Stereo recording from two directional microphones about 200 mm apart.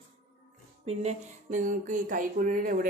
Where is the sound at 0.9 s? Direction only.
35° right (ahead or behind).